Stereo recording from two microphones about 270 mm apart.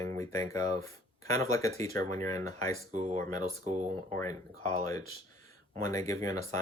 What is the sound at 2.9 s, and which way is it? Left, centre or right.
Speech, right.